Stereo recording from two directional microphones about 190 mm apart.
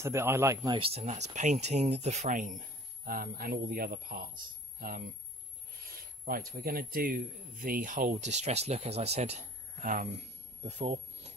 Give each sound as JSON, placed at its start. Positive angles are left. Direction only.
{"t": 0.0, "sound": "speech", "side_deg": -15}
{"t": 0.7, "sound": "speech", "side_deg": -30}
{"t": 10.6, "sound": "a sound", "side_deg": -35}